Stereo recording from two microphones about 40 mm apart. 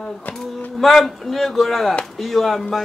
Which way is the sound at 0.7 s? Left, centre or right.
Centre.